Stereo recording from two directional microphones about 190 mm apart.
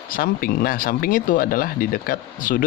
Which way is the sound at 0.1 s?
50° left (ahead or behind).